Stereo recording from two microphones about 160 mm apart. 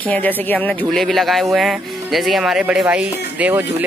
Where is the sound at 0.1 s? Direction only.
10° left (ahead or behind).